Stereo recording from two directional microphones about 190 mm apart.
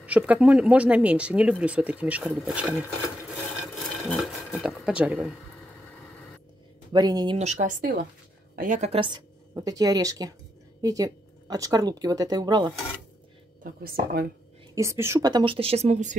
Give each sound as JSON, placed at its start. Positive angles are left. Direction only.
{"t": 0.0, "sound": "speech", "side_deg": -5}
{"t": 3.9, "sound": "a sound", "side_deg": 0}
{"t": 6.9, "sound": "speech", "side_deg": -20}
{"t": 7.3, "sound": "speech", "side_deg": -40}
{"t": 8.5, "sound": "speech", "side_deg": -40}
{"t": 13.7, "sound": "speech", "side_deg": -50}
{"t": 14.8, "sound": "speech", "side_deg": -15}